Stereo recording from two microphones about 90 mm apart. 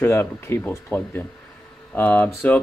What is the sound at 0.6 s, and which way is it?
Speech, 15° left (ahead or behind).